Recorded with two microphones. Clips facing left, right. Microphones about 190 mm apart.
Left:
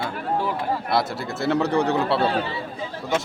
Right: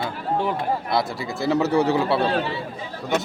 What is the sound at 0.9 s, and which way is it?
A man's voice, centre (ahead or behind).